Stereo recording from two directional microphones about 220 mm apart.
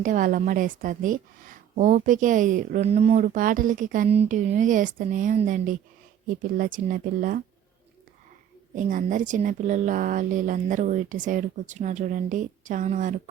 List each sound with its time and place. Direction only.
0.0 s a woman's voice: 35° right (ahead or behind)
8.7 s a woman's voice: 35° right (ahead or behind)